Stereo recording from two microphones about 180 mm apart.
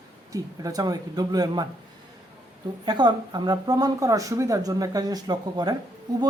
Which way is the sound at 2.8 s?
25° right (ahead or behind).